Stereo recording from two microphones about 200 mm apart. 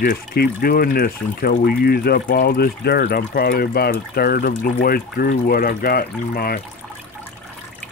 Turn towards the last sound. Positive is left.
turn(degrees=50)  # may be behind; listen again after turning